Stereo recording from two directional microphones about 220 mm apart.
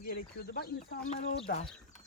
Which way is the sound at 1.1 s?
30° left (ahead or behind).